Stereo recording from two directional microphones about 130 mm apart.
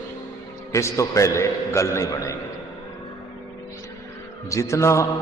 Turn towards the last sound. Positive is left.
turn(degrees=25)  # may be behind; listen again after turning